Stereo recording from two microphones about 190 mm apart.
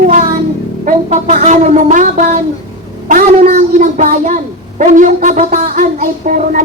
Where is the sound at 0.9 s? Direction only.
45° right (ahead or behind).